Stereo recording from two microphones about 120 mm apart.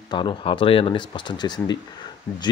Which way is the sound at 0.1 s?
40° left (ahead or behind).